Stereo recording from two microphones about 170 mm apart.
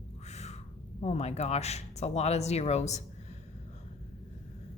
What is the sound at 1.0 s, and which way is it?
Speech, 40° left (ahead or behind).